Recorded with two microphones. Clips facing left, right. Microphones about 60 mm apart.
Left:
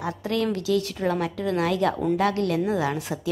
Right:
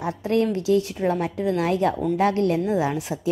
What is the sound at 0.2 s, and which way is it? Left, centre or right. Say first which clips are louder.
A woman's voice: right 5 dB; right.